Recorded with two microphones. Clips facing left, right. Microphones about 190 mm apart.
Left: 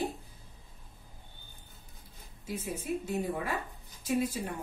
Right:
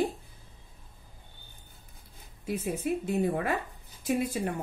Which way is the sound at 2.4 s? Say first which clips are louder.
Right 6 dB; 60° right (ahead or behind).